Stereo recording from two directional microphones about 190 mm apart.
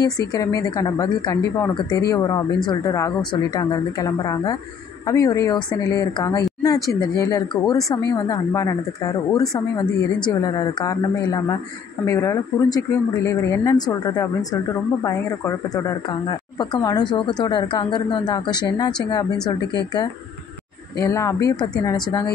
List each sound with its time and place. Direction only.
0.0 s speech: 20° left (ahead or behind)
21.0 s speech: 15° left (ahead or behind)